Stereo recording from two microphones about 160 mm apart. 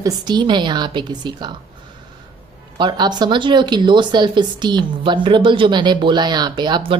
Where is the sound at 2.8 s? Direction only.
25° right (ahead or behind).